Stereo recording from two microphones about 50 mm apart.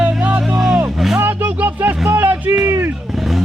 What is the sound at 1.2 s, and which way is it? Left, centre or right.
Music, right.